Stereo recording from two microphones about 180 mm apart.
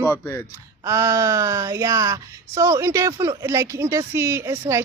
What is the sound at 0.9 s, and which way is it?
Speech, 15° right (ahead or behind).